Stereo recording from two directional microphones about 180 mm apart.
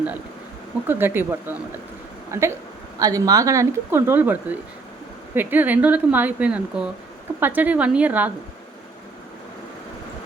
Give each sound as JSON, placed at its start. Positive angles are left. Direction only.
{"t": 0.9, "sound": "speech", "side_deg": -10}